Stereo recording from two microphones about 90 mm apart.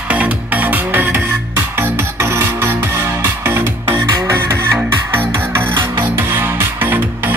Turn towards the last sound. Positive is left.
turn(degrees=-20)  # may be behind; listen again after turning